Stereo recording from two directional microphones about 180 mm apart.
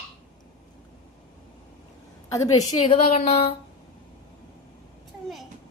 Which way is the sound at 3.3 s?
35° left (ahead or behind).